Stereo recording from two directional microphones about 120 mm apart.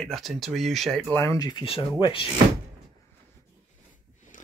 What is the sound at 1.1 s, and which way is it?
Speech, 25° left (ahead or behind).